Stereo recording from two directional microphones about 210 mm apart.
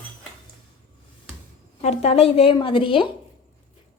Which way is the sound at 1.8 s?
30° left (ahead or behind).